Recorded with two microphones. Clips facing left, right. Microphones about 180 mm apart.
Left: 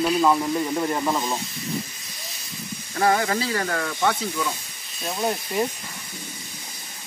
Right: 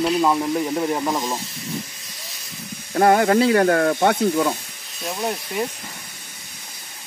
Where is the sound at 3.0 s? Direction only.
55° right (ahead or behind).